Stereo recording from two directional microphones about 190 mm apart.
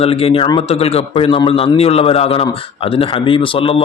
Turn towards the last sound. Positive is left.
turn(degrees=30)  # may be behind; listen again after turning